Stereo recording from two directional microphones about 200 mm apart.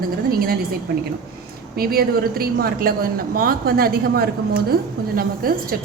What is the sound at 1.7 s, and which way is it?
A woman's voice, 50° right (ahead or behind).